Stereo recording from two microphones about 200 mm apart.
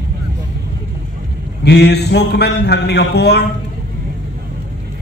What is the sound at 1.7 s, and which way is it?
Mantra, 55° left (ahead or behind).